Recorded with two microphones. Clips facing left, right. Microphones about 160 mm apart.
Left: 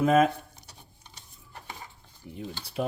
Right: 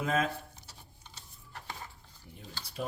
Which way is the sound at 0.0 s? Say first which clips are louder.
Left 10 dB; 60° left (ahead or behind).